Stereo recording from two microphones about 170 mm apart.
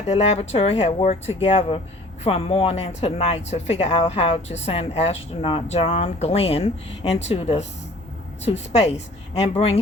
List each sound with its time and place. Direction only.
0.1 s speech: 40° left (ahead or behind)